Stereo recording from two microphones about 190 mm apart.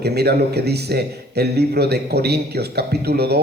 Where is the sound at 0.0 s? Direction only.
60° right (ahead or behind).